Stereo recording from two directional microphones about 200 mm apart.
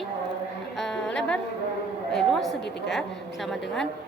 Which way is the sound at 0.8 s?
Centre (ahead or behind).